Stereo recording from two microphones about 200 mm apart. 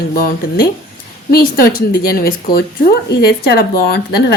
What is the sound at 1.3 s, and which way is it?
A woman's voice, 50° left (ahead or behind).